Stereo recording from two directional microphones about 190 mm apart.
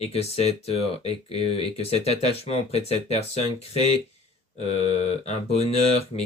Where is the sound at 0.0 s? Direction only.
35° left (ahead or behind).